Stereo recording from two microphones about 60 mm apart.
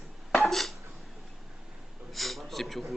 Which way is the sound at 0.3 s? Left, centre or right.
Centre.